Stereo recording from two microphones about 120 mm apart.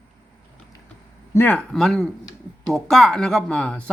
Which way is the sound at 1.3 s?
15° left (ahead or behind).